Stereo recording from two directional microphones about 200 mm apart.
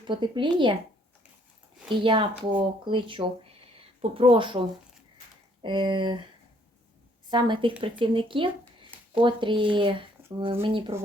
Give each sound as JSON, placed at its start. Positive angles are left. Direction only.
{"t": 0.0, "sound": "speech", "side_deg": -25}
{"t": 1.9, "sound": "a woman's voice", "side_deg": -25}
{"t": 5.6, "sound": "speech", "side_deg": -25}
{"t": 7.3, "sound": "a woman's voice", "side_deg": -25}